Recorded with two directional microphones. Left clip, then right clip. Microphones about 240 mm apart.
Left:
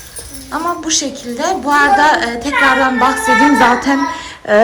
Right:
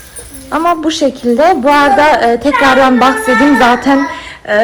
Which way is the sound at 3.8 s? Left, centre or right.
Centre.